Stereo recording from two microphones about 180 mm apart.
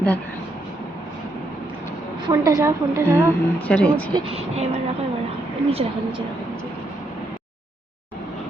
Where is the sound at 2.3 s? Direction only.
20° right (ahead or behind).